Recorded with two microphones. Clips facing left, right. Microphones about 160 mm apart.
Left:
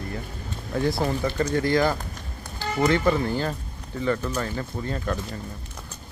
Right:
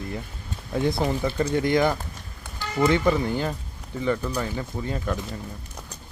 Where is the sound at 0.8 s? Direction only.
20° right (ahead or behind).